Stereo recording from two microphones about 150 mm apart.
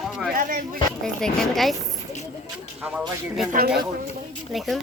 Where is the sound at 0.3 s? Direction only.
65° right (ahead or behind).